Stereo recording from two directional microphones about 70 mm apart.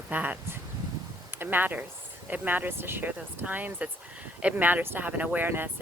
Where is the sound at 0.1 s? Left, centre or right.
Right.